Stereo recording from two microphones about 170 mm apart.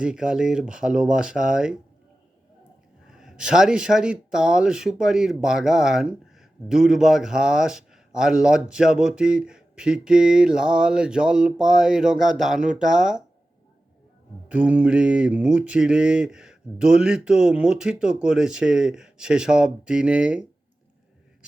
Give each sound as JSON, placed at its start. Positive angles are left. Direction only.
{"t": 0.0, "sound": "speech", "side_deg": -5}
{"t": 3.1, "sound": "speech", "side_deg": -5}
{"t": 14.4, "sound": "speech", "side_deg": -10}